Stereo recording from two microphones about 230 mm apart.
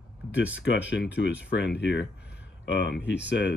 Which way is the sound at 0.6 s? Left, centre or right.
Left.